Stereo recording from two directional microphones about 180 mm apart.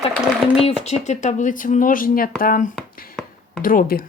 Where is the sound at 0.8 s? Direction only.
40° left (ahead or behind).